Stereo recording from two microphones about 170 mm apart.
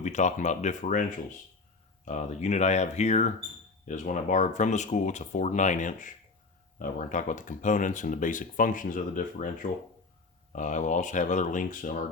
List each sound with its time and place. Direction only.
0.0 s speech: 45° left (ahead or behind)
2.0 s speech: 45° left (ahead or behind)